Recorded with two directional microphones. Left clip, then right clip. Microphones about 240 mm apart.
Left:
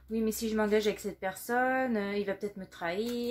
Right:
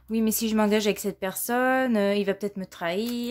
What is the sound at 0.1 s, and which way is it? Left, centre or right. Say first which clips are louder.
Speech: right 5 dB; right.